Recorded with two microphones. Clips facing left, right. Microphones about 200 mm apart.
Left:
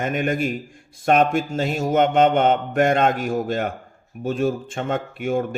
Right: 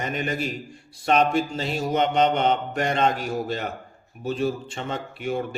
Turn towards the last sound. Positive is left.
turn(degrees=50)  # may be behind; listen again after turning